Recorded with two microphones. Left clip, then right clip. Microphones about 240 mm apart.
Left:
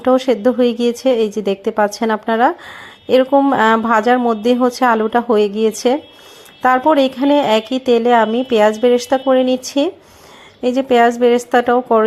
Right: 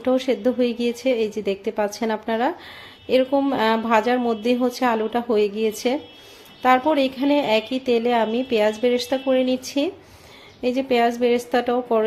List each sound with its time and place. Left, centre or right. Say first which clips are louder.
0.0 s speech: left 7 dB; left